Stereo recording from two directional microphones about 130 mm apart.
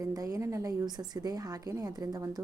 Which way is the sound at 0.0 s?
25° right (ahead or behind).